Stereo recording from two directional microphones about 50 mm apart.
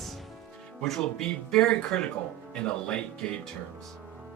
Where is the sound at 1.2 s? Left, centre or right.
Centre.